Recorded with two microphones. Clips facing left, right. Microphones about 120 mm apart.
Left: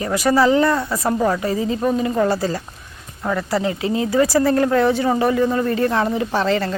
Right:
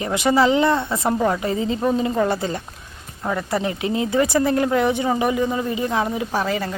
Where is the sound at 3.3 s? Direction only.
20° right (ahead or behind).